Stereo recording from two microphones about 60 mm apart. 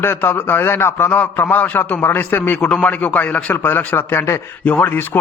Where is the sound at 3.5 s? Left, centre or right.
Left.